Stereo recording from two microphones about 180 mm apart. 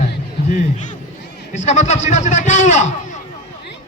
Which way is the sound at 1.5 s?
40° left (ahead or behind).